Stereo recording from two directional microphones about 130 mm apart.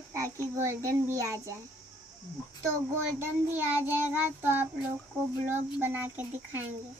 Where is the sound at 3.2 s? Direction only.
15° right (ahead or behind).